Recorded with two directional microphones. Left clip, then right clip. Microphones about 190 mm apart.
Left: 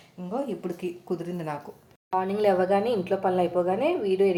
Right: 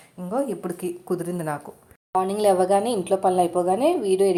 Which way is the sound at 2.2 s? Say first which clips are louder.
Right 4 dB; 30° right (ahead or behind).